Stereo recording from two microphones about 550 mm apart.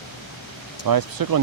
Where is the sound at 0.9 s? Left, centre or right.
Right.